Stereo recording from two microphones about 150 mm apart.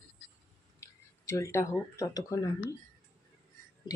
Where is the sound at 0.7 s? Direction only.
20° left (ahead or behind).